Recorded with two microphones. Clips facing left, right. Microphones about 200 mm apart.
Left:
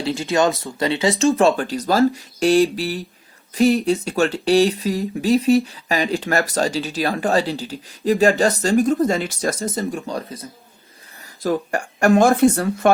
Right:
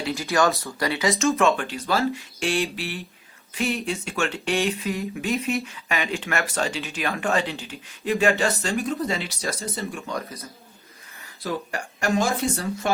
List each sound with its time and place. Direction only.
0.2 s speech: 25° left (ahead or behind); by 10.0 s 45° left (ahead or behind)
10.1 s speech: 30° left (ahead or behind)
11.4 s speech: 50° left (ahead or behind)